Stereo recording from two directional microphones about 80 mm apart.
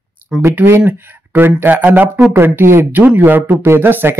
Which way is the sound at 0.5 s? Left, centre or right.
Right.